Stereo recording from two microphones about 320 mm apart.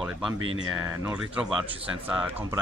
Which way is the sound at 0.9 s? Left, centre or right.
Centre.